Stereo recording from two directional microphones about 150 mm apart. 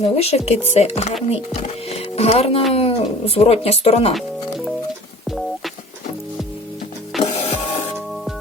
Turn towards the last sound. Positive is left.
turn(degrees=45)  # may be behind; listen again after turning